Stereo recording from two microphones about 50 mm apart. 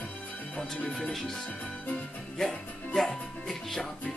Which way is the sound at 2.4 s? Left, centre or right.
Centre.